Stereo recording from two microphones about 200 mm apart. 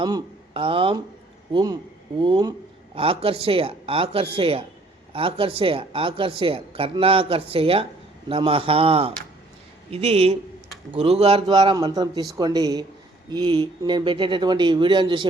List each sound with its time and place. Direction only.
0.0 s a man's voice: 25° right (ahead or behind)